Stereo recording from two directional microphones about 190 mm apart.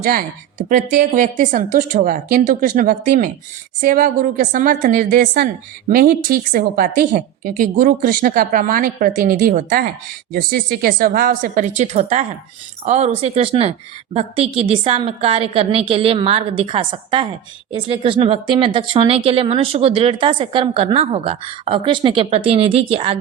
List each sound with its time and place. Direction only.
0.0 s a woman's voice: 50° right (ahead or behind); by 23.1 s 30° right (ahead or behind)